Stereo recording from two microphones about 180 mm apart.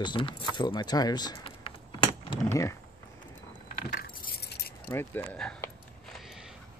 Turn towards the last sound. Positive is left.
turn(degrees=5)  # may be behind; listen again after turning